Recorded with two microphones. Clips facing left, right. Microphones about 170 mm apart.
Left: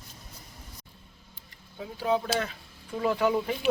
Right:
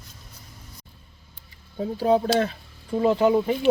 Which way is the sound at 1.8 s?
40° right (ahead or behind).